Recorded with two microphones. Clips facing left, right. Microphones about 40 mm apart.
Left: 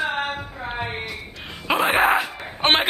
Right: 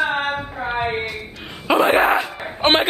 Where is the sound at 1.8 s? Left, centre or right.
Centre.